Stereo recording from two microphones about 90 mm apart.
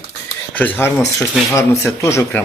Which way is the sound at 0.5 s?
20° left (ahead or behind).